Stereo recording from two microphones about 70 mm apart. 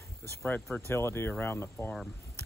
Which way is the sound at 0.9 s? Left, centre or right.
Left.